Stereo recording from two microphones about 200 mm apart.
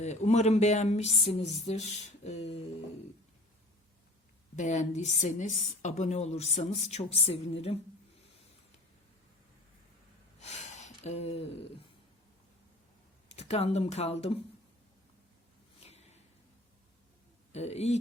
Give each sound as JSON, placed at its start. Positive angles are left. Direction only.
{"t": 0.0, "sound": "speech", "side_deg": 35}
{"t": 4.5, "sound": "speech", "side_deg": 35}
{"t": 10.4, "sound": "gasp", "side_deg": 35}
{"t": 13.2, "sound": "speech", "side_deg": 30}
{"t": 15.8, "sound": "a sound", "side_deg": 35}
{"t": 17.5, "sound": "speech", "side_deg": 30}